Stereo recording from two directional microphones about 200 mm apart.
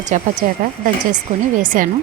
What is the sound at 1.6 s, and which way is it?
Speech, 40° right (ahead or behind).